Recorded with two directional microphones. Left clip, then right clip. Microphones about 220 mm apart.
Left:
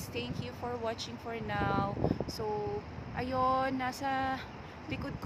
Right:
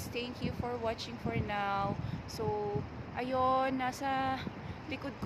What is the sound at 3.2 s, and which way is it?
Speech, 5° left (ahead or behind).